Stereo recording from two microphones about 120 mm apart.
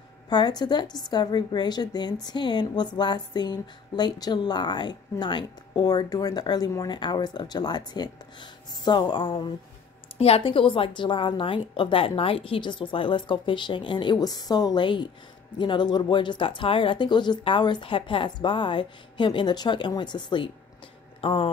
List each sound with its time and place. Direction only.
0.3 s speech: 35° left (ahead or behind)
10.1 s a woman's voice: 55° left (ahead or behind)